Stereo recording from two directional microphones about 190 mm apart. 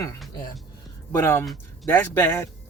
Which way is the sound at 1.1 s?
10° left (ahead or behind).